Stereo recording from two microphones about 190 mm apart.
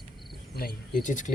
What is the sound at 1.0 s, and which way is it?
Speech, 40° left (ahead or behind).